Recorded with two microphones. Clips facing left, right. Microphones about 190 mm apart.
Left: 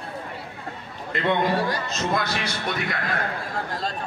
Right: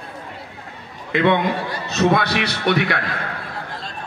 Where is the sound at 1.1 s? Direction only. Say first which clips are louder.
Right 4 dB; 75° right (ahead or behind).